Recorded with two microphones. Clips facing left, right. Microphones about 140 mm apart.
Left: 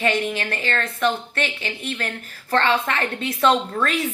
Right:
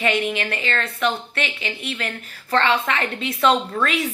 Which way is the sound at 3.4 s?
5° right (ahead or behind).